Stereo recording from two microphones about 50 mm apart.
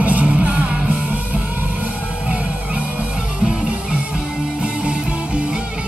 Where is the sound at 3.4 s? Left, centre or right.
Right.